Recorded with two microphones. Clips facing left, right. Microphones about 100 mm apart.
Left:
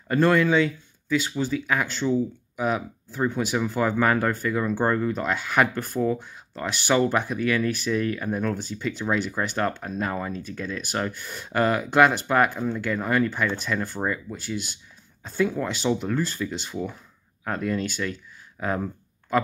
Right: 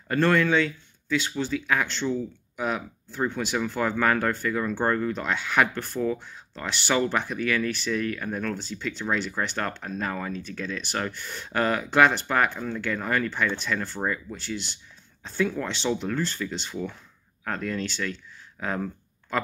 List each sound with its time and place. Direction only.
0.1 s speech: 10° left (ahead or behind)